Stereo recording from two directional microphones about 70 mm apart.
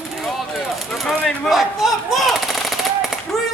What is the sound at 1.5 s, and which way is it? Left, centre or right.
Machine gun, centre.